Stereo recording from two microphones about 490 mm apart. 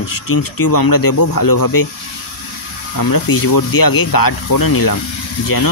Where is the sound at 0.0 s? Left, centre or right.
Left.